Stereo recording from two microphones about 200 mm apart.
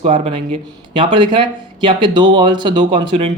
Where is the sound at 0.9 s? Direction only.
25° right (ahead or behind).